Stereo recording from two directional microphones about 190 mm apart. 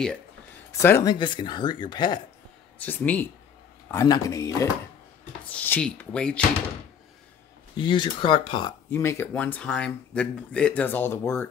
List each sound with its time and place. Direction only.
0.7 s speech: 15° left (ahead or behind)
2.8 s speech: 10° left (ahead or behind)
7.7 s speech: 25° left (ahead or behind)
8.9 s speech: 15° left (ahead or behind)